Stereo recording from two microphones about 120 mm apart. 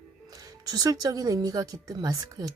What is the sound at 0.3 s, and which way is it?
Speech, 35° right (ahead or behind).